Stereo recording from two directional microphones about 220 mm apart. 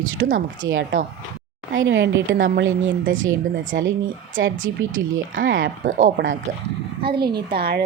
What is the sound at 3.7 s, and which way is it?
A woman's voice, 50° right (ahead or behind).